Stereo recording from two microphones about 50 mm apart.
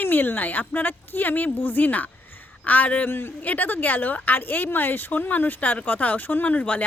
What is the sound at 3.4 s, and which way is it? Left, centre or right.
A woman's voice, left.